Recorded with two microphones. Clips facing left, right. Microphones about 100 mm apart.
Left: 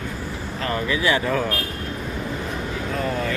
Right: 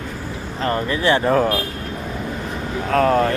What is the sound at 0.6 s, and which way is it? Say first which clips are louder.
Speech: right 3 dB; 40° right (ahead or behind).